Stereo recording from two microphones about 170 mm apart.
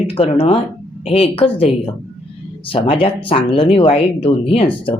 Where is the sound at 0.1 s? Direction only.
35° left (ahead or behind).